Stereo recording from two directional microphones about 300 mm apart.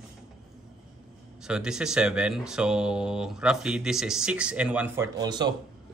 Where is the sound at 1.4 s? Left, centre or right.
Centre.